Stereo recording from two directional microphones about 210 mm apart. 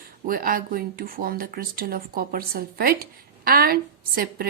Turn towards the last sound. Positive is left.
turn(degrees=-45)  # may be behind; listen again after turning